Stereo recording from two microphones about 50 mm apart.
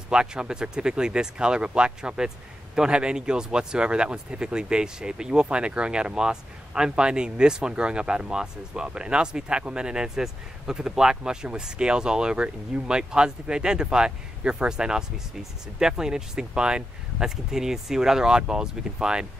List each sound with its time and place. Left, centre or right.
0.1 s speech: centre